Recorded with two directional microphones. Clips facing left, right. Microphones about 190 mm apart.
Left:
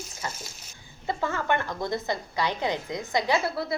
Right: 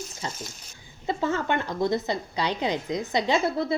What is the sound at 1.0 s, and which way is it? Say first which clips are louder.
A woman's voice: right 2 dB; 20° right (ahead or behind).